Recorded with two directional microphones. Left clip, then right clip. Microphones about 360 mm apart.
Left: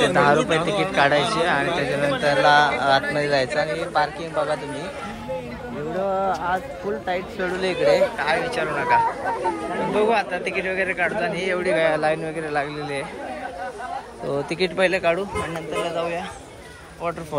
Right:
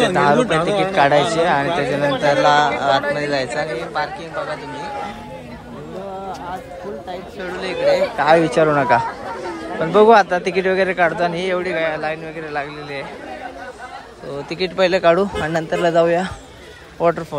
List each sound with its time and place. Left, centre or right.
0.1 s a man's voice: centre
0.6 s a man's voice: right
0.9 s a man's voice: centre
5.9 s a woman's voice: centre
8.2 s a man's voice: centre
14.3 s a man's voice: centre